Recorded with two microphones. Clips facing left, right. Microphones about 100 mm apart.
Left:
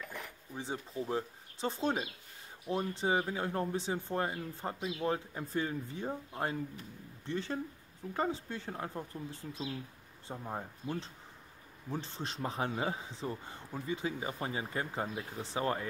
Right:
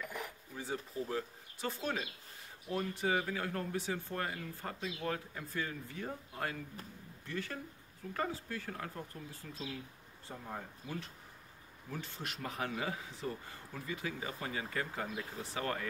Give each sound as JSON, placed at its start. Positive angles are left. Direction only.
{"t": 0.6, "sound": "a man's voice", "side_deg": 25}